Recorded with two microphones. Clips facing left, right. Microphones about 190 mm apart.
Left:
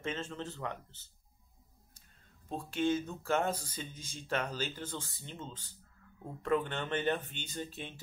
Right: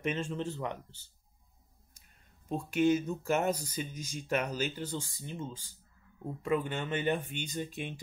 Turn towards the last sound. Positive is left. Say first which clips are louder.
# right 4 dB
turn(degrees=-15)  # may be behind; listen again after turning